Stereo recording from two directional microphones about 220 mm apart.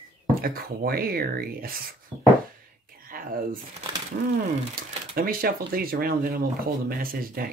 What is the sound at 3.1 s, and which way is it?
Speech, 40° right (ahead or behind).